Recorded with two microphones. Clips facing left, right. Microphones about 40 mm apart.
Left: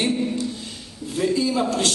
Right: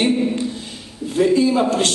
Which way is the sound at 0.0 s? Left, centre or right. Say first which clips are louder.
Right 5 dB; right.